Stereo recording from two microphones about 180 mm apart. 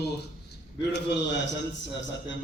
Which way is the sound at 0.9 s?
70° left (ahead or behind).